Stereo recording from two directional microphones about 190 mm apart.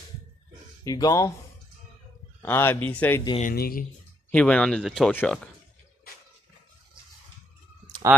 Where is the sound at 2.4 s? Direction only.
10° left (ahead or behind).